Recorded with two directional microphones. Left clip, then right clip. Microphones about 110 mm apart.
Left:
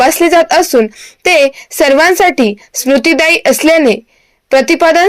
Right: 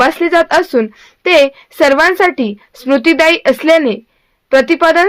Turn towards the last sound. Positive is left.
turn(degrees=35)  # may be behind; listen again after turning